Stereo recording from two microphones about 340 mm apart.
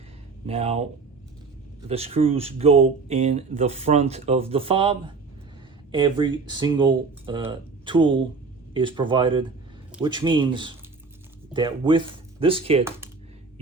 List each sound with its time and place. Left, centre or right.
0.4 s speech: centre
1.9 s speech: centre